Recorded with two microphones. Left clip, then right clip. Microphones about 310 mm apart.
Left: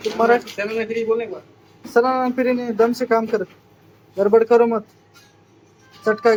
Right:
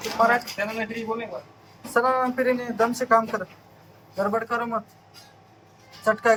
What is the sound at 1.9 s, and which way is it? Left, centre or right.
Speech, centre.